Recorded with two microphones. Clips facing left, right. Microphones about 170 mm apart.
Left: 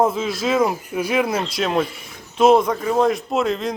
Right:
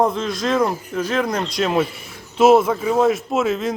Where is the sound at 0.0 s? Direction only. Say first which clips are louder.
Even; 5° left (ahead or behind).